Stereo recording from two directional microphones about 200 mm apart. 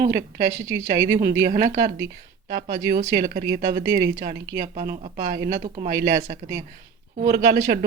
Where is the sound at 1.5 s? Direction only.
45° right (ahead or behind).